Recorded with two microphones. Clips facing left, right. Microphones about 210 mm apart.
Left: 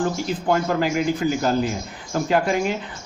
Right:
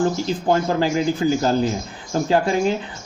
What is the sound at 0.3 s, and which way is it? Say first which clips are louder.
Speech: right 2 dB; 30° right (ahead or behind).